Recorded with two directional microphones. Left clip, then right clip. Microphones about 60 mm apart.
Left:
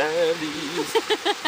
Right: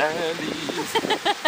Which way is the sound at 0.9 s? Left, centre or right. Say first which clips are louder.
Even; centre.